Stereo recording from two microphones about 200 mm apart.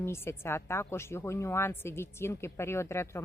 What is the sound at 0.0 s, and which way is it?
A woman's voice, 10° left (ahead or behind).